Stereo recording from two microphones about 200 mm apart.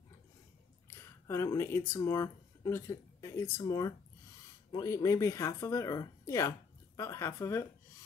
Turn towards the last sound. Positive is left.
turn(degrees=15)  # may be behind; listen again after turning